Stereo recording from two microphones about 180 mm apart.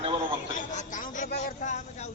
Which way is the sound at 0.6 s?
45° left (ahead or behind).